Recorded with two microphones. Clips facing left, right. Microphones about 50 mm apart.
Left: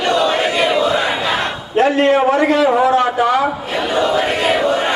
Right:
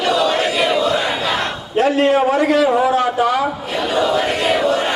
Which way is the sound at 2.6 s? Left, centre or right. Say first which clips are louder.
Left 2 dB; centre.